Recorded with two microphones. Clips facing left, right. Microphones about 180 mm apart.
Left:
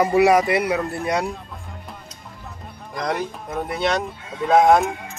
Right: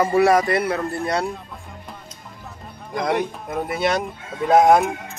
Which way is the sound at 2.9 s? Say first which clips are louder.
Right 3 dB; centre (ahead or behind).